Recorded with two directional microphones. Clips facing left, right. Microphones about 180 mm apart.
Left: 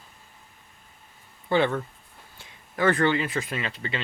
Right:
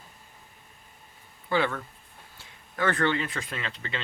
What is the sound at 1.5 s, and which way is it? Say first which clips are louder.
Speech: left 4 dB; 25° left (ahead or behind).